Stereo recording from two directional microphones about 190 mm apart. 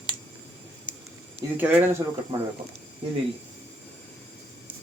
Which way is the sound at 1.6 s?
10° right (ahead or behind).